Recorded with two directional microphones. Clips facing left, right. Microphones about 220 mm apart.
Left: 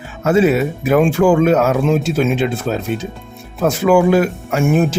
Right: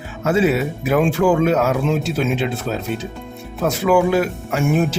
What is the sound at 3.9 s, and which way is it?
Speech, 50° left (ahead or behind).